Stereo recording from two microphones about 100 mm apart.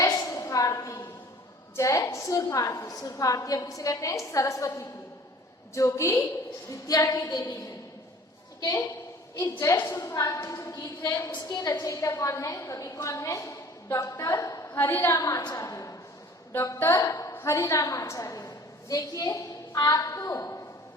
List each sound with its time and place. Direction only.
0.0 s a sound: 35° left (ahead or behind)
1.7 s a woman's voice: 30° left (ahead or behind)
9.7 s a woman's voice: 20° left (ahead or behind)
10.0 s a woman's voice: 35° left (ahead or behind)
10.8 s a woman's voice: 45° left (ahead or behind)
11.7 s a woman's voice: 30° left (ahead or behind)
15.2 s a woman's voice: 40° left (ahead or behind)